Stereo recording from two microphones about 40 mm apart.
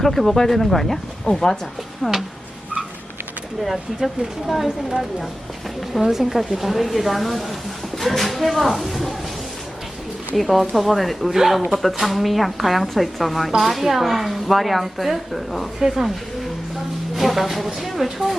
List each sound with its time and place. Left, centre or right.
0.0 s speech: centre
1.2 s speech: centre
3.6 s speech: centre
6.1 s speech: centre
10.3 s speech: centre
17.2 s speech: centre